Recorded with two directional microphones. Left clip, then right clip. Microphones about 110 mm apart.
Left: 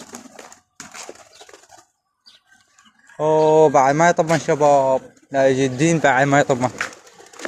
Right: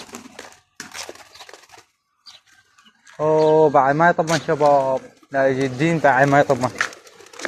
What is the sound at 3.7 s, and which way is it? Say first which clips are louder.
Speech: left 1 dB; 75° left (ahead or behind).